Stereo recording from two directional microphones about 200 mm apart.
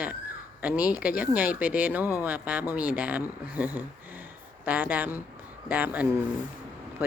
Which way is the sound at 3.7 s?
10° right (ahead or behind).